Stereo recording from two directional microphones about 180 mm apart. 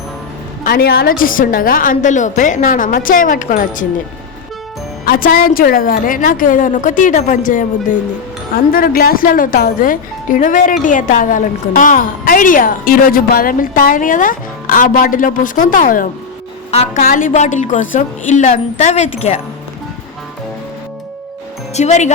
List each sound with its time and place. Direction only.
0.6 s speech: 60° left (ahead or behind)
5.0 s speech: 55° left (ahead or behind)
16.7 s a woman's voice: 40° left (ahead or behind)
21.8 s a woman's voice: 40° left (ahead or behind)